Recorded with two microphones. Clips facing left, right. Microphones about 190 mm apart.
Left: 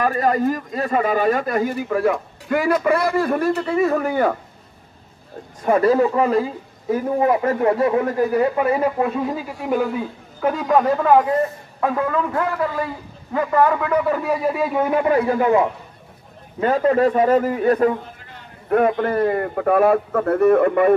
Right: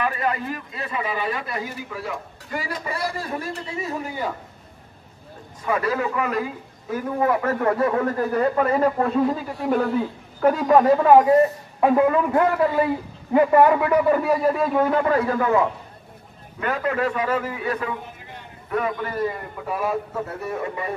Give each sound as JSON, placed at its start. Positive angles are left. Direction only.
{"t": 0.0, "sound": "speech", "side_deg": 40}
{"t": 5.7, "sound": "a man's voice", "side_deg": 35}
{"t": 6.9, "sound": "a man's voice", "side_deg": 20}
{"t": 11.8, "sound": "a man's voice", "side_deg": -20}
{"t": 14.8, "sound": "a man's voice", "side_deg": 15}
{"t": 16.5, "sound": "a man's voice", "side_deg": 30}
{"t": 18.7, "sound": "speech", "side_deg": 55}